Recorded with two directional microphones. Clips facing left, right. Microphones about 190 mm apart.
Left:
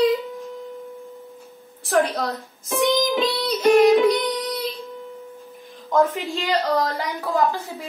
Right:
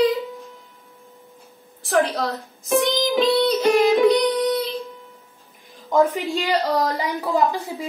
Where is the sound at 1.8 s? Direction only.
Centre (ahead or behind).